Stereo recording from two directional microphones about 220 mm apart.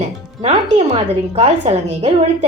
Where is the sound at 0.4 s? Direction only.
30° right (ahead or behind).